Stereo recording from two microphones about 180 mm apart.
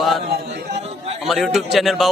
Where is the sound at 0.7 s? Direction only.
35° right (ahead or behind).